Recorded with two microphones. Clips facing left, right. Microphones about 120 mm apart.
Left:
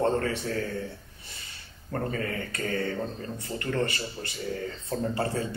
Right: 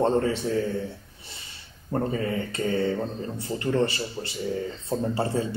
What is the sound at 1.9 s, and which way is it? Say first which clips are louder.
Speech: right 4 dB; 20° right (ahead or behind).